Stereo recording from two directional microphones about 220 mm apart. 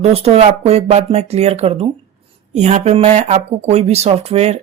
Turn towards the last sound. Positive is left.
turn(degrees=-30)  # may be behind; listen again after turning